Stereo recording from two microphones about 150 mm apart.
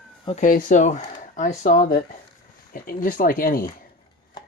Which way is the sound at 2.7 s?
70° left (ahead or behind).